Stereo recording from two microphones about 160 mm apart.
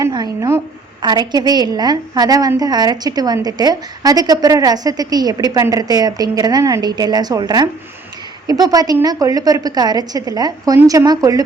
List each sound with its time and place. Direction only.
0.0 s a woman's voice: 25° right (ahead or behind)